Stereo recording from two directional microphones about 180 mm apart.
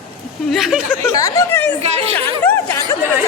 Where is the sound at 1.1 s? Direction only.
20° left (ahead or behind).